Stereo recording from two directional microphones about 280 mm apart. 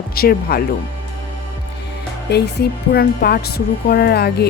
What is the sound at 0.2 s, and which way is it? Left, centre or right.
Speech, left.